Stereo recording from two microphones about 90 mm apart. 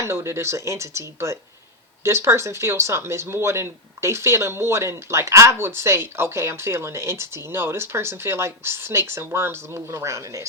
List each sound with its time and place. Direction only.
0.0 s speech: 30° right (ahead or behind)